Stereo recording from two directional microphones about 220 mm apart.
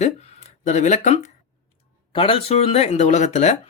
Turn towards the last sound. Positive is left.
turn(degrees=30)  # may be behind; listen again after turning